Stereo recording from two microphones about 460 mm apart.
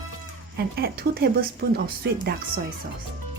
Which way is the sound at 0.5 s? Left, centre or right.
Centre.